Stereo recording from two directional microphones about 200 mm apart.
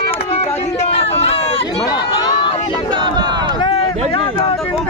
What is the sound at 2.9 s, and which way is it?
Speech, 20° right (ahead or behind).